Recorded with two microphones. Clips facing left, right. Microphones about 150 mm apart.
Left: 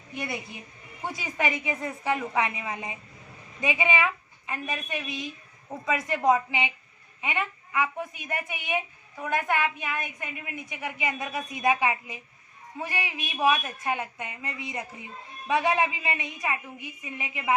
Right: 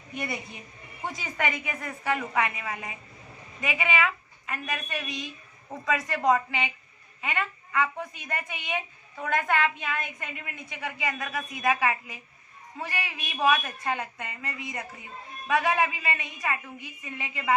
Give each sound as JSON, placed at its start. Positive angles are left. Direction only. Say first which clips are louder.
{"t": 1.0, "sound": "a woman's voice", "louder": "left 1 dB", "side_deg": 10}
{"t": 1.5, "sound": "a woman's voice", "louder": "left 4 dB", "side_deg": 25}